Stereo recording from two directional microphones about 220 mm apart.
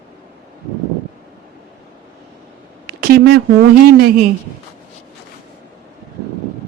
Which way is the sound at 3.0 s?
45° right (ahead or behind).